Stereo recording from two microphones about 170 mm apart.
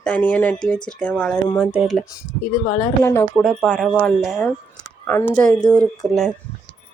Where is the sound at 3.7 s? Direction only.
5° right (ahead or behind).